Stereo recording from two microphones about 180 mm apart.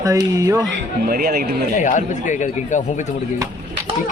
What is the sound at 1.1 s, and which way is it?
Speech, 60° right (ahead or behind).